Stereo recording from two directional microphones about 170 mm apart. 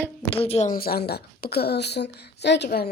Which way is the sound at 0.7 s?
65° left (ahead or behind).